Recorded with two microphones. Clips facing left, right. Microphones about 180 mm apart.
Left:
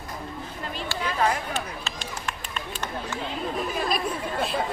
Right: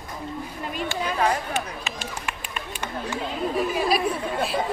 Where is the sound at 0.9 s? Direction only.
20° right (ahead or behind).